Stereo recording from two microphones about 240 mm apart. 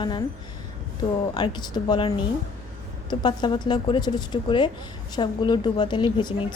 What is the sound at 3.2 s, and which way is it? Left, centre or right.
A woman's voice, centre.